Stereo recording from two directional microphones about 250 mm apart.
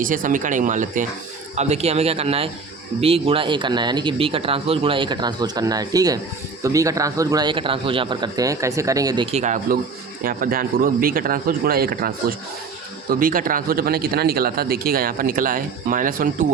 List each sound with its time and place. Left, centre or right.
0.0 s a man's voice: right